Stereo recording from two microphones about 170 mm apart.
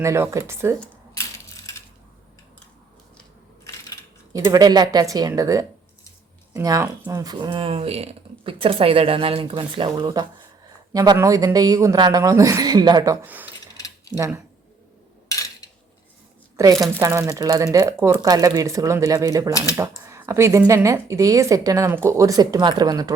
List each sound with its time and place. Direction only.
0.0 s speech: 15° right (ahead or behind)
1.1 s coin: 20° left (ahead or behind)
4.3 s speech: 20° right (ahead or behind)
13.2 s speech: 10° right (ahead or behind)
15.3 s a sound: 20° left (ahead or behind)
16.7 s speech: centre (ahead or behind)
17.0 s speech: 15° right (ahead or behind)